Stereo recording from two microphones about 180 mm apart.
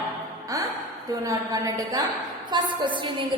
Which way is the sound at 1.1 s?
20° right (ahead or behind).